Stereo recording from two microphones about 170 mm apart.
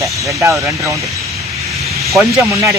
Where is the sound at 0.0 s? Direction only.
20° right (ahead or behind).